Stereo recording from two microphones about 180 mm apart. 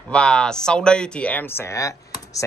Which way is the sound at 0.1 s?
5° left (ahead or behind).